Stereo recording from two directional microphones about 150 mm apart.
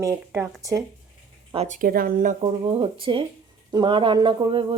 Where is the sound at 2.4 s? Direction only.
40° right (ahead or behind).